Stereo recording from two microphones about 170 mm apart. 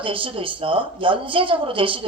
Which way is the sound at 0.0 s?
30° right (ahead or behind).